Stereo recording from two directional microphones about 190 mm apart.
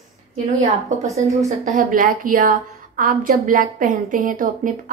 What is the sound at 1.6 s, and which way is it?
A woman's voice, 45° right (ahead or behind).